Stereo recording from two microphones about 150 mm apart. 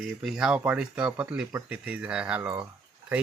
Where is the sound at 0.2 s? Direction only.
5° right (ahead or behind).